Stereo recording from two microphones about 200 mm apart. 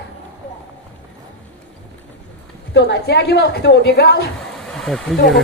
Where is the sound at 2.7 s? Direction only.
60° left (ahead or behind).